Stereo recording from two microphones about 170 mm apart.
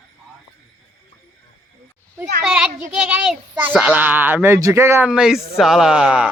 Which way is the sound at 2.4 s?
5° right (ahead or behind).